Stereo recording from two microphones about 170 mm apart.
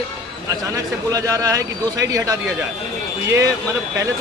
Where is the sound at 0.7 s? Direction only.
20° right (ahead or behind).